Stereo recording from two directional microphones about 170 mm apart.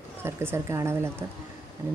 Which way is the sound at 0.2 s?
15° right (ahead or behind).